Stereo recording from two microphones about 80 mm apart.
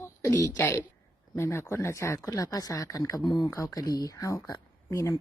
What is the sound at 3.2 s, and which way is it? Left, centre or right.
Speech, centre.